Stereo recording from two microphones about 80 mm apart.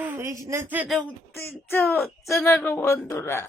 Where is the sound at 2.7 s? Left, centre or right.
Left.